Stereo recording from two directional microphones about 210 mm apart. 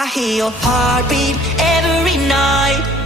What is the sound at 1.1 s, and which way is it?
Music, centre (ahead or behind).